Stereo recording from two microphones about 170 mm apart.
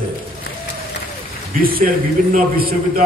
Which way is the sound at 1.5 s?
60° right (ahead or behind).